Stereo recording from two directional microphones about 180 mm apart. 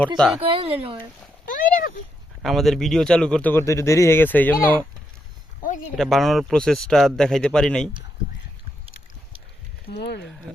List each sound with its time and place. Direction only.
0.3 s speech: 30° right (ahead or behind)
1.5 s a sound: 50° left (ahead or behind)
2.4 s speech: centre (ahead or behind)
6.0 s speech: centre (ahead or behind)
9.9 s speech: 70° left (ahead or behind)